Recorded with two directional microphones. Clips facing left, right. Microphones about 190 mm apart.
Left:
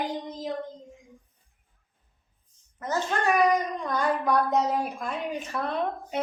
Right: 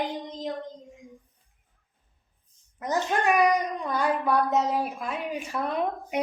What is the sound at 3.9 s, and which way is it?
Speech, 5° right (ahead or behind).